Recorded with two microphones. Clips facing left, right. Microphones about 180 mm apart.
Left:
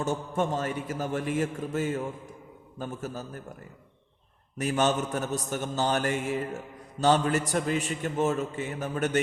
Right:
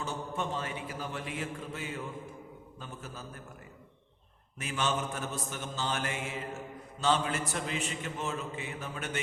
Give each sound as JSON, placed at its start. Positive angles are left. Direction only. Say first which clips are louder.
{"t": 0.0, "sound": "a man's voice", "louder": "left 7 dB", "side_deg": 45}
{"t": 4.5, "sound": "a man's voice", "louder": "left 7 dB", "side_deg": 40}